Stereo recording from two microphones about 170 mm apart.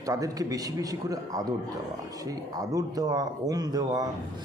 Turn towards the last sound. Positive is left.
turn(degrees=-20)  # may be behind; listen again after turning